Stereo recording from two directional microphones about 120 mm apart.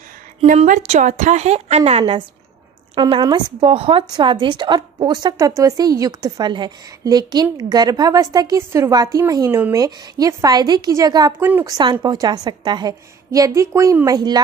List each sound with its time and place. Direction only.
0.5 s a woman's voice: 85° right; by 14.4 s 35° right (ahead or behind)